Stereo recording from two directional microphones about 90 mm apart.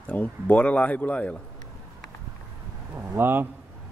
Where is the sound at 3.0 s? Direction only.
25° right (ahead or behind).